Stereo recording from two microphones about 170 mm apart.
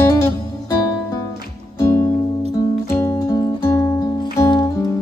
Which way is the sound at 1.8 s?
15° left (ahead or behind).